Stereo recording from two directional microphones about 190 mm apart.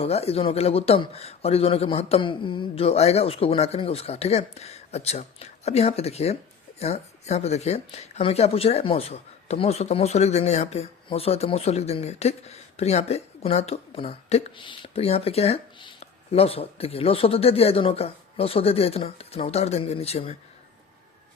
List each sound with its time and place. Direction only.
0.0 s speech: 30° left (ahead or behind)